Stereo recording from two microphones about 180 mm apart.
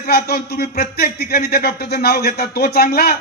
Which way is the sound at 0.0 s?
60° left (ahead or behind).